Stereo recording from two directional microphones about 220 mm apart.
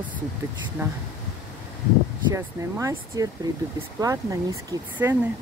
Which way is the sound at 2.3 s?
15° right (ahead or behind).